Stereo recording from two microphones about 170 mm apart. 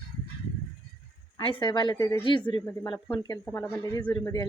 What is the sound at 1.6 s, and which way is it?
Speech, 25° left (ahead or behind).